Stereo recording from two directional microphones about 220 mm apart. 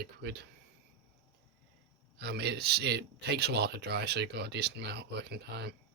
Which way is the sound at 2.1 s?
50° right (ahead or behind).